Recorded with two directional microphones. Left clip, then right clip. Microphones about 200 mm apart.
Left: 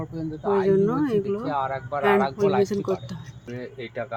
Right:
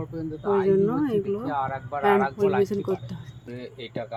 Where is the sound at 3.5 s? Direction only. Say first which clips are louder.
Left 2 dB; 35° left (ahead or behind).